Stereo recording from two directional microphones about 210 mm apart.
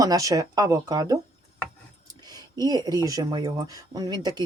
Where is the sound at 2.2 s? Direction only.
20° right (ahead or behind).